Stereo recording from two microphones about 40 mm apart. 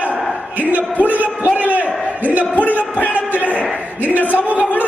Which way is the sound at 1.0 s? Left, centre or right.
Right.